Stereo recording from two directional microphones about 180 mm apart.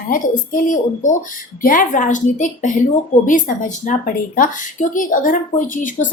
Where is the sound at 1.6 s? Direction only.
50° left (ahead or behind).